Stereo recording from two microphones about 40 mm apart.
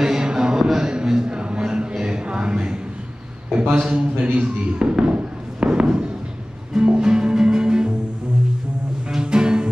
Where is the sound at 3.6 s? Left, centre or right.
Right.